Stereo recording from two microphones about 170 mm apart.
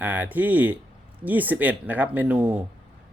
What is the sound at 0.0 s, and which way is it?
Speech, 10° right (ahead or behind).